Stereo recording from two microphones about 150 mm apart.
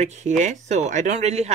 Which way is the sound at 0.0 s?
50° right (ahead or behind).